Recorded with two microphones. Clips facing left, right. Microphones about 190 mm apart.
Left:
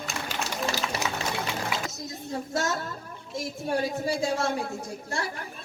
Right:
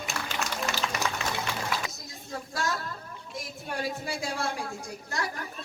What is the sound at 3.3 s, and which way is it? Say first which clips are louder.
A woman's voice: left 8 dB; 25° left (ahead or behind).